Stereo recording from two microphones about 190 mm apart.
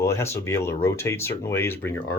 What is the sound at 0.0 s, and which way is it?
Speech, 15° left (ahead or behind).